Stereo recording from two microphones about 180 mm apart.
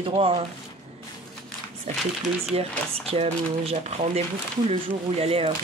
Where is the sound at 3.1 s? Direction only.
35° right (ahead or behind).